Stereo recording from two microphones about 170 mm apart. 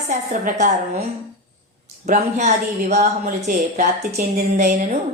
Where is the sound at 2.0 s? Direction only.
45° right (ahead or behind).